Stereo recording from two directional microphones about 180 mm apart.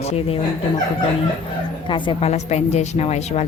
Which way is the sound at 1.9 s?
30° left (ahead or behind).